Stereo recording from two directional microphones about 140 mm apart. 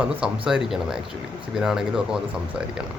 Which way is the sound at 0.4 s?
5° right (ahead or behind).